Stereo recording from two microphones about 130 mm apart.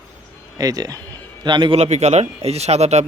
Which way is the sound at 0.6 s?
30° right (ahead or behind).